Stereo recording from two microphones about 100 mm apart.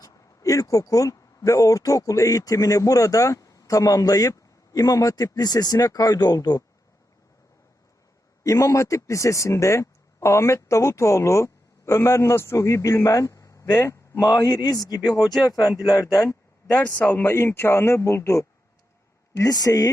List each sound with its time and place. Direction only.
0.0 s speech: 35° left (ahead or behind)
8.4 s speech: 30° left (ahead or behind)
14.3 s speech: 35° left (ahead or behind)
16.6 s a man's voice: 15° left (ahead or behind); by 19.9 s 35° left (ahead or behind)